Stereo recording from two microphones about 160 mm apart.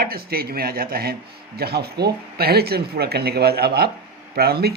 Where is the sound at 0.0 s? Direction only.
70° right (ahead or behind).